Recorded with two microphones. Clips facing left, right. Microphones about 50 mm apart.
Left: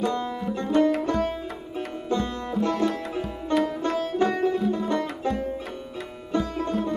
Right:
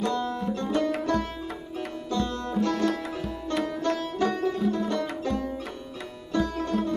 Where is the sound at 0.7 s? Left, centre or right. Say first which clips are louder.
Left 7 dB; centre.